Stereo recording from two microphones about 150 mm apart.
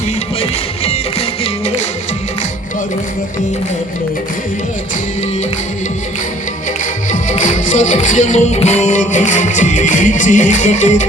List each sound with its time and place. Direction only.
0.3 s music: 40° left (ahead or behind)
7.1 s music: 55° left (ahead or behind)